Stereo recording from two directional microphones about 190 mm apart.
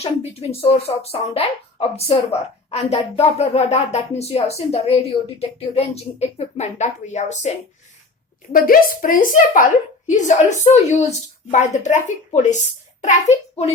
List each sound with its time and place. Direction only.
0.0 s speech: 35° left (ahead or behind)
8.5 s speech: 50° left (ahead or behind)